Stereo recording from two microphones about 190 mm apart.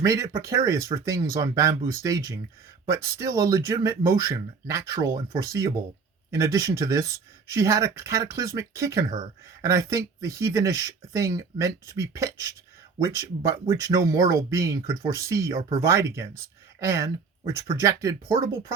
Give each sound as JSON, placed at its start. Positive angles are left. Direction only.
{"t": 0.0, "sound": "speech", "side_deg": -15}
{"t": 9.0, "sound": "speech", "side_deg": -35}
{"t": 9.6, "sound": "speech", "side_deg": -15}